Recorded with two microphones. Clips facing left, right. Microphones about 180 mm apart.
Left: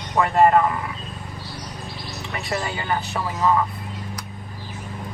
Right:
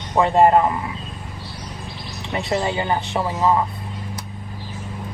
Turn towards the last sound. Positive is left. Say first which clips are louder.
# right 2 dB
turn(degrees=-25)  # may be behind; listen again after turning